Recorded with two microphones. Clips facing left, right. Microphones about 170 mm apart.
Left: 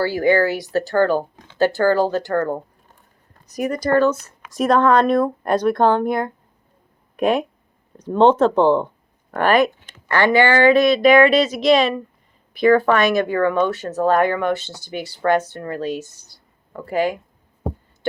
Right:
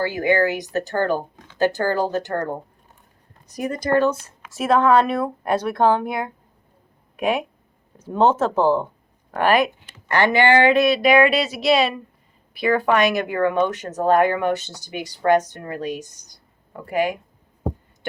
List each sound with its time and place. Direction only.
0.0 s speech: 20° right (ahead or behind)
4.5 s speech: 5° right (ahead or behind)
9.8 s a sound: 15° right (ahead or behind)
10.3 s speech: 20° right (ahead or behind)